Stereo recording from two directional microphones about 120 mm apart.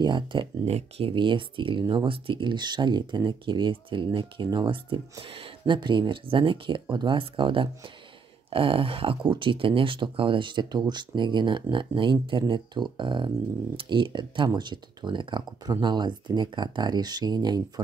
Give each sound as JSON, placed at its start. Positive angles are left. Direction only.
{"t": 0.0, "sound": "speech", "side_deg": -40}
{"t": 0.7, "sound": "speech", "side_deg": -60}